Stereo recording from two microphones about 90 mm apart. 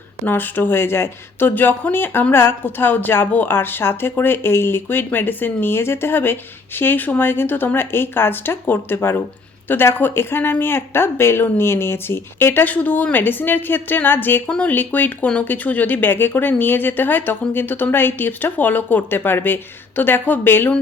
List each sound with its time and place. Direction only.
0.3 s speech: 20° left (ahead or behind)